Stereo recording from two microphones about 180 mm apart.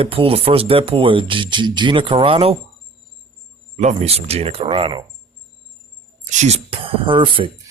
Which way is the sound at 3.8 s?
35° right (ahead or behind).